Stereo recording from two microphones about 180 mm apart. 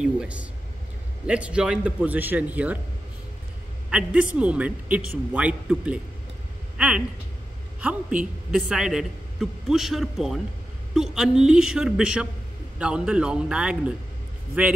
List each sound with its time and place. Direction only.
0.0 s a man's voice: 5° right (ahead or behind)
3.9 s a man's voice: 5° right (ahead or behind)
7.8 s a man's voice: 5° right (ahead or behind)